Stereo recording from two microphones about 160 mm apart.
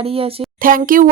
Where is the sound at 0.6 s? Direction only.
60° right (ahead or behind).